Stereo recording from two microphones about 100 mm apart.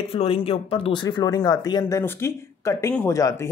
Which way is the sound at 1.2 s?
40° left (ahead or behind).